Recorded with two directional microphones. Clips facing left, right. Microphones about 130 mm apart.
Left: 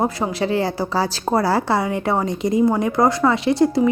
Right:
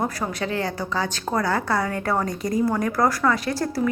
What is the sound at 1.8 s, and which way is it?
A woman's voice, 15° left (ahead or behind).